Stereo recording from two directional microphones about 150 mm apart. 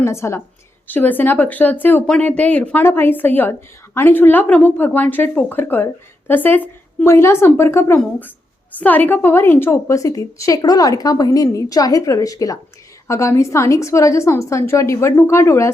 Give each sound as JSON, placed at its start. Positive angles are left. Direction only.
{"t": 0.0, "sound": "a woman's voice", "side_deg": 20}